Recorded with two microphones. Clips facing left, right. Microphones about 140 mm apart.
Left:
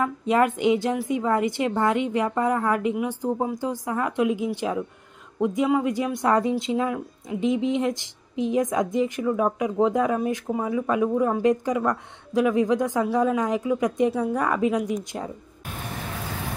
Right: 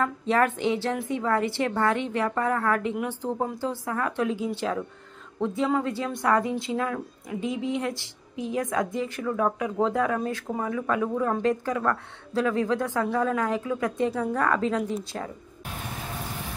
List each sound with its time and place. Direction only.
0.0 s speech: 15° left (ahead or behind)